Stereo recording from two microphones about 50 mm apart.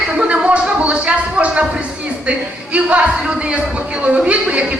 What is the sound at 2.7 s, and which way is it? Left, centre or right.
Speech, right.